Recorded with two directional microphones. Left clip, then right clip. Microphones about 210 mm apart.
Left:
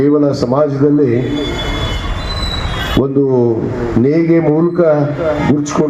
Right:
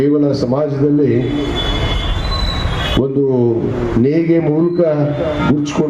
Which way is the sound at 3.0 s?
25° left (ahead or behind).